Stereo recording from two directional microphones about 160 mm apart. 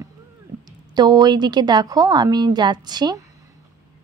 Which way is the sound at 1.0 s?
25° right (ahead or behind).